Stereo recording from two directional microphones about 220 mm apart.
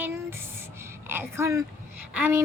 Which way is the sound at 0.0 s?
10° right (ahead or behind).